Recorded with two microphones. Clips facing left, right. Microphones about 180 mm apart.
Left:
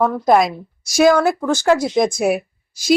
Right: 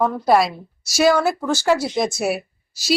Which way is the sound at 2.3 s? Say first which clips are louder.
Left 5 dB; 50° left (ahead or behind).